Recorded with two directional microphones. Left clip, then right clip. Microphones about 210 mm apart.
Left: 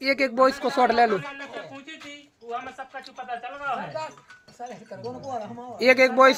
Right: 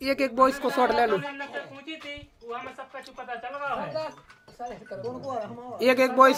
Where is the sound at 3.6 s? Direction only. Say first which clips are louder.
Even; 10° left (ahead or behind).